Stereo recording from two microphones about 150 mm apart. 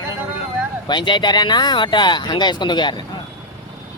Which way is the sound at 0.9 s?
30° left (ahead or behind).